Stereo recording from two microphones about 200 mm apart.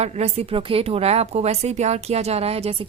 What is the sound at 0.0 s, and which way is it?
A woman's voice, 30° right (ahead or behind).